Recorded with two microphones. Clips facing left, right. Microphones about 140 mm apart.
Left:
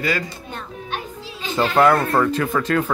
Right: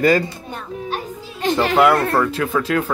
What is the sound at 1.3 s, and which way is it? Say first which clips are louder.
Music: right 3 dB; 75° right (ahead or behind).